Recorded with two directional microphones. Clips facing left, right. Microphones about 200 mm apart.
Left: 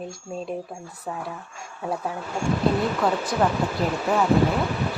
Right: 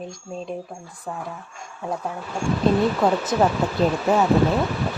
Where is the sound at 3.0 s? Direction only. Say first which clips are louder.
Right 3 dB; 20° right (ahead or behind).